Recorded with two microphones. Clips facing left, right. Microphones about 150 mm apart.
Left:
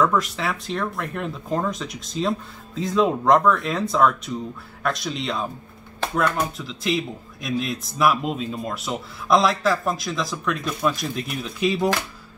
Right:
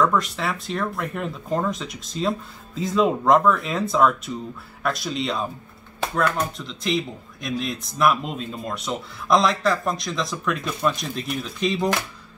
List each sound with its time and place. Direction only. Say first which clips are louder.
0.0 s speech: even; centre (ahead or behind)